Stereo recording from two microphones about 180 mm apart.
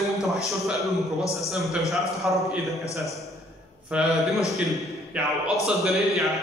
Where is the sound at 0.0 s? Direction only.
Centre (ahead or behind).